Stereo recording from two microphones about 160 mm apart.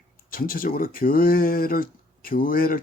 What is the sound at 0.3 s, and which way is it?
Speech, 65° left (ahead or behind).